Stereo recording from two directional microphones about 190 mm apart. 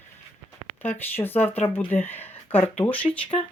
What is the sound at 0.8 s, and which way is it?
Speech, 10° left (ahead or behind).